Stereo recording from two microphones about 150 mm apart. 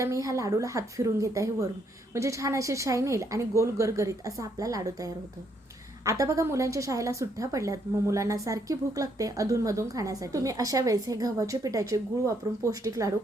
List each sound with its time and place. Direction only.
0.0 s a woman's voice: 20° right (ahead or behind)